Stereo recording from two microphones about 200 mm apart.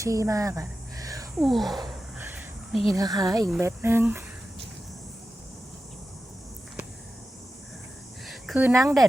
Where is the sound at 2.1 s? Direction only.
10° right (ahead or behind).